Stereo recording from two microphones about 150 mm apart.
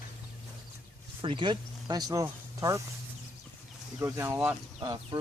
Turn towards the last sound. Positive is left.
turn(degrees=-25)  # may be behind; listen again after turning